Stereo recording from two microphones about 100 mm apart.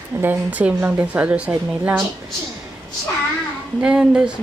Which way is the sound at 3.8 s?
10° right (ahead or behind).